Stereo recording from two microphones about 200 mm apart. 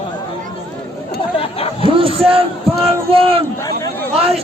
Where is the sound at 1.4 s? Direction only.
30° left (ahead or behind).